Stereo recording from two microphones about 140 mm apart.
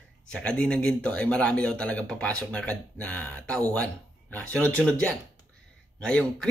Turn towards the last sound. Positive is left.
turn(degrees=5)  # may be behind; listen again after turning